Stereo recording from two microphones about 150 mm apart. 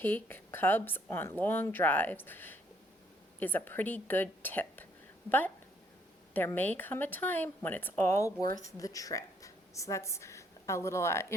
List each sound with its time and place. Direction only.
0.0 s a woman's voice: 15° left (ahead or behind)
6.3 s a woman's voice: 15° left (ahead or behind)